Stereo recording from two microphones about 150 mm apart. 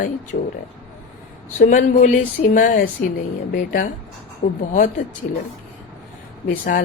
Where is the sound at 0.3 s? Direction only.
90° left.